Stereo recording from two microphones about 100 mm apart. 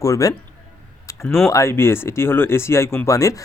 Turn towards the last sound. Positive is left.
turn(degrees=30)  # may be behind; listen again after turning